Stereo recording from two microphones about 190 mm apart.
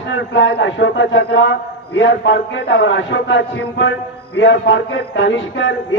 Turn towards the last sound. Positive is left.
turn(degrees=75)  # may be behind; listen again after turning